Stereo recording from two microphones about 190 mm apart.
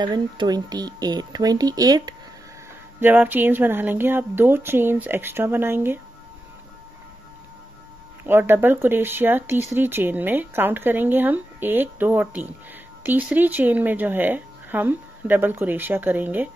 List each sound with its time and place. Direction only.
0.0 s speech: 25° right (ahead or behind)
3.0 s speech: 10° right (ahead or behind)
8.2 s speech: 10° right (ahead or behind)